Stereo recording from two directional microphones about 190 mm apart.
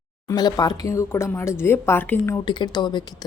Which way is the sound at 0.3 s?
20° left (ahead or behind).